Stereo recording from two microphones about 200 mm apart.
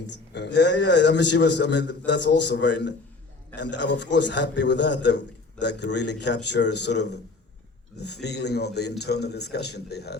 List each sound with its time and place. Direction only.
0.1 s a man's voice: 60° left (ahead or behind)